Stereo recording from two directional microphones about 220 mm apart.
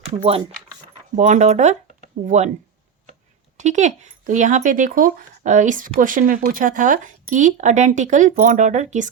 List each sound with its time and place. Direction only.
1.1 s speech: 30° right (ahead or behind)
3.6 s speech: 35° right (ahead or behind)